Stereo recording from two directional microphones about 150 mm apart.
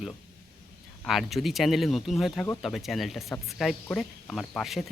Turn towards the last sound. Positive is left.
turn(degrees=0)  # may be behind; listen again after turning